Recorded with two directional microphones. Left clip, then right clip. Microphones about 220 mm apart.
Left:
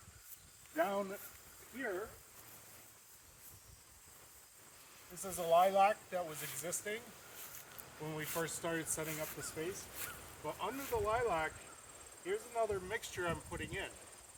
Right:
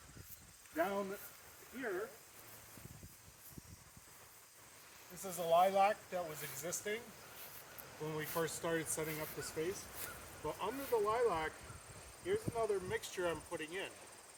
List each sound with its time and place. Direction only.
0.8 s speech: 10° left (ahead or behind)
5.2 s speech: 10° left (ahead or behind)
8.0 s speech: 10° left (ahead or behind)